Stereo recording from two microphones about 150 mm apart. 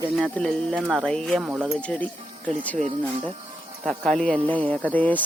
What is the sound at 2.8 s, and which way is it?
Speech, 35° right (ahead or behind).